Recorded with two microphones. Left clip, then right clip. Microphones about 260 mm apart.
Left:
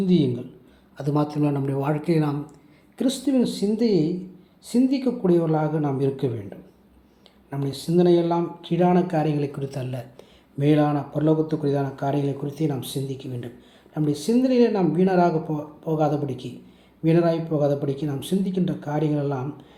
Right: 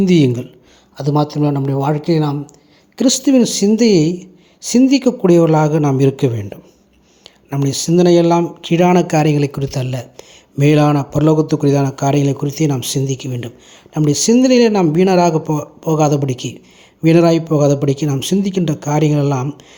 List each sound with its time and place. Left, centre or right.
0.0 s speech: right
0.9 s speech: right
2.9 s speech: right